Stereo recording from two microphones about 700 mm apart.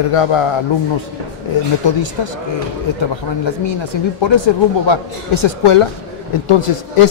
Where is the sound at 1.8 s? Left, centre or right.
Left.